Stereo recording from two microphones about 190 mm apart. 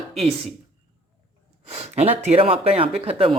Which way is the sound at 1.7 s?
35° right (ahead or behind).